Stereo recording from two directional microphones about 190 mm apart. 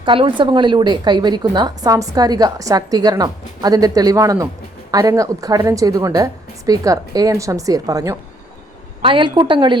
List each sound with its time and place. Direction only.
0.0 s a woman's voice: 25° right (ahead or behind)